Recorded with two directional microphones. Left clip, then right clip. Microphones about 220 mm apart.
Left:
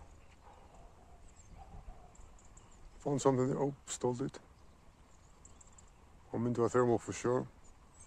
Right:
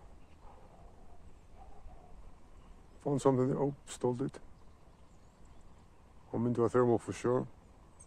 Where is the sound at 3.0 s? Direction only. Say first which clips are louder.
Right 1 dB; centre (ahead or behind).